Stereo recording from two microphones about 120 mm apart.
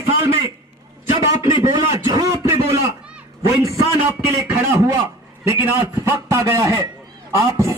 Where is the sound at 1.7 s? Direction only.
30° right (ahead or behind).